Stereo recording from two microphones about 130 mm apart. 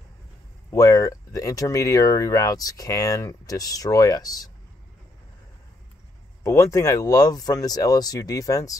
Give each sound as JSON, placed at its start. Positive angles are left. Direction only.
{"t": 0.7, "sound": "speech", "side_deg": 25}
{"t": 6.4, "sound": "speech", "side_deg": 25}